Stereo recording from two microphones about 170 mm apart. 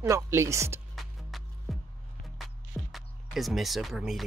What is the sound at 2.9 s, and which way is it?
Speech, centre (ahead or behind).